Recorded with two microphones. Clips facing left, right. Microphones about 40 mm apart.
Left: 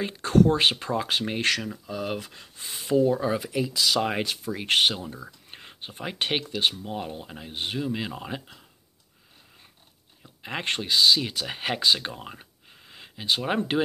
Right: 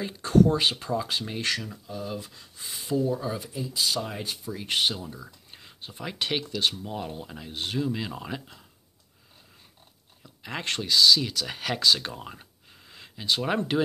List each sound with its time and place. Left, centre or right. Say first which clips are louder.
0.0 s speech: left 1 dB; left
1.9 s speech: left 3 dB; left
2.3 s speech: left 1 dB; left
3.3 s speech: left 5 dB; left
4.5 s speech: left 4 dB; left
5.0 s speech: left 2 dB; left
6.8 s speech: left 1 dB; centre
10.2 s speech: left 2 dB; left